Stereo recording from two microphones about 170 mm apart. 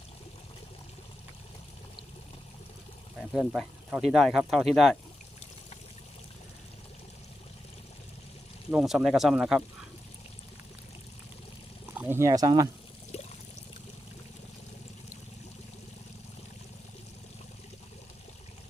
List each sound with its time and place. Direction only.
3.3 s speech: 5° right (ahead or behind)
8.7 s speech: 5° right (ahead or behind)
11.9 s speech: 15° right (ahead or behind)